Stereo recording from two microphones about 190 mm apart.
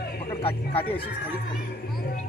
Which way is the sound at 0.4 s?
30° left (ahead or behind).